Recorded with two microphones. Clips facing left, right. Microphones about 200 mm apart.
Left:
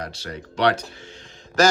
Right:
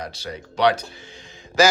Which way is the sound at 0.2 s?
10° right (ahead or behind).